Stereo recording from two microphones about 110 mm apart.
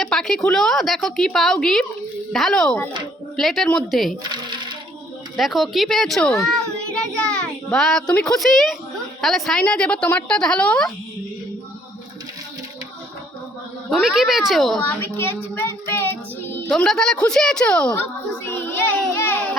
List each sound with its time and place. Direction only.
0.0 s a woman's voice: 5° left (ahead or behind)
5.4 s a woman's voice: centre (ahead or behind)
13.9 s a woman's voice: 5° right (ahead or behind)
14.8 s a child's voice: 20° left (ahead or behind)
16.7 s a woman's voice: 5° left (ahead or behind)
18.4 s child singing: 20° left (ahead or behind)